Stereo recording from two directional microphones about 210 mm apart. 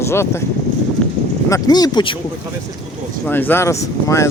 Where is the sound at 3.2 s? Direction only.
10° left (ahead or behind).